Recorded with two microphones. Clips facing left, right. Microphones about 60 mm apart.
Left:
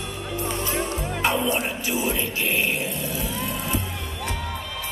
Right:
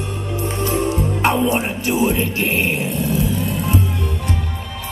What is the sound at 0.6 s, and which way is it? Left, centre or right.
Music, right.